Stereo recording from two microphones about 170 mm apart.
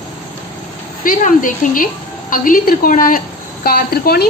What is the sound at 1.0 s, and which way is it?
A woman's voice, 50° left (ahead or behind).